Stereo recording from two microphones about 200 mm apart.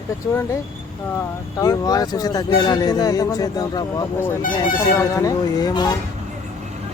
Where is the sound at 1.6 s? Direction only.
20° left (ahead or behind).